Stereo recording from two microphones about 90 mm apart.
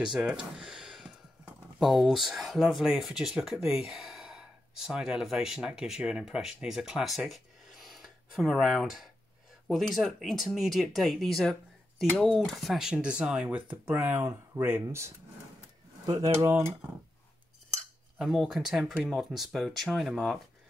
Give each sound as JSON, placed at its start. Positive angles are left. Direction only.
{"t": 0.0, "sound": "speech", "side_deg": -10}
{"t": 13.8, "sound": "speech", "side_deg": -25}
{"t": 16.4, "sound": "speech", "side_deg": -25}
{"t": 18.1, "sound": "speech", "side_deg": 0}